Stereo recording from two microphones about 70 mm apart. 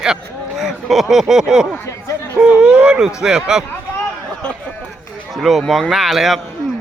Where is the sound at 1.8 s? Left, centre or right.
Left.